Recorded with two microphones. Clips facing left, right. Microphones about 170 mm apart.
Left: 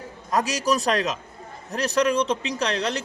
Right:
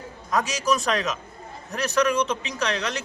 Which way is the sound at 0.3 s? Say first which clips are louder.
Left 1 dB; 35° left (ahead or behind).